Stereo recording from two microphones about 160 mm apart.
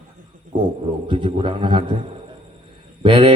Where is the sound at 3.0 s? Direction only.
35° right (ahead or behind).